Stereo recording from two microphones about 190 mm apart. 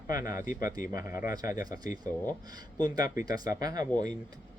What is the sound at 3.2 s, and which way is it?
Speech, 20° right (ahead or behind).